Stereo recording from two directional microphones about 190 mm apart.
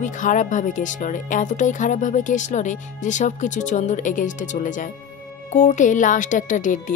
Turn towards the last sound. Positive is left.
turn(degrees=45)  # may be behind; listen again after turning